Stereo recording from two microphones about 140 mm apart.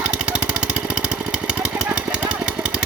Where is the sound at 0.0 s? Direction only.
10° right (ahead or behind).